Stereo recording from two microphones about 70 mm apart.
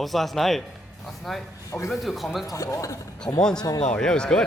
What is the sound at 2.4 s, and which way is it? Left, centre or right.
Speech, left.